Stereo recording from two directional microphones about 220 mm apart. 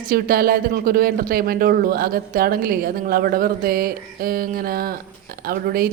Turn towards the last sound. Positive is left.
turn(degrees=-40)  # may be behind; listen again after turning